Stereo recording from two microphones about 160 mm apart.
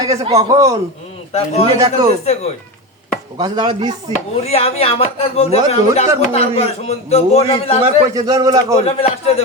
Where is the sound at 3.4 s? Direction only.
25° right (ahead or behind).